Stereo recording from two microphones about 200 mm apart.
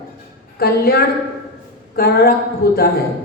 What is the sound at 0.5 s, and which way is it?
A woman's voice, 50° left (ahead or behind).